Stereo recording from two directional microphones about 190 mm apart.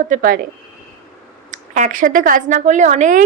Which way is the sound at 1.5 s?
40° right (ahead or behind).